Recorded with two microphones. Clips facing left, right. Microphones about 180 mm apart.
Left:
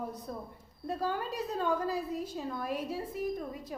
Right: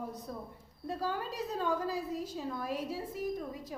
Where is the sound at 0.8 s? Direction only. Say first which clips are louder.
Left 2 dB; 55° left (ahead or behind).